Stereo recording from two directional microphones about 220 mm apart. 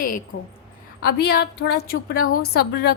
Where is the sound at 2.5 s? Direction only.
45° left (ahead or behind).